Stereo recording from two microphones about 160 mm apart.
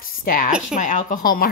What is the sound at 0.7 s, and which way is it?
Speech, 50° left (ahead or behind).